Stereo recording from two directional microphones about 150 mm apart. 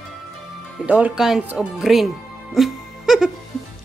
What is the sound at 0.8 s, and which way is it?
Speech, 10° right (ahead or behind).